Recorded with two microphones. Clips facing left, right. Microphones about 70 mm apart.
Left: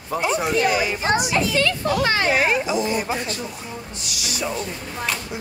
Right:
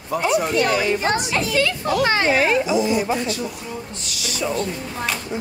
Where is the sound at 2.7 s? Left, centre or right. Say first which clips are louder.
Right 3 dB; left.